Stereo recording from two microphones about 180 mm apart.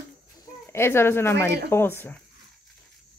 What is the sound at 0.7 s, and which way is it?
Speech, 15° left (ahead or behind).